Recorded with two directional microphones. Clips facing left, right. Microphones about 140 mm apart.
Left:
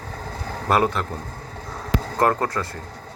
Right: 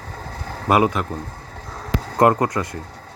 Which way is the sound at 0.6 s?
10° right (ahead or behind).